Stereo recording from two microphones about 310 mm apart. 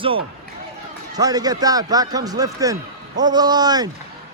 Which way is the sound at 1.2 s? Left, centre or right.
Centre.